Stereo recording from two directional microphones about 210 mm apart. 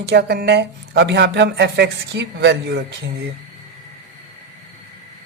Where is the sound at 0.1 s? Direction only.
50° right (ahead or behind).